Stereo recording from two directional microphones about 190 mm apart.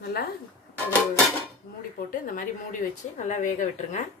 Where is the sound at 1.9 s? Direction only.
45° left (ahead or behind).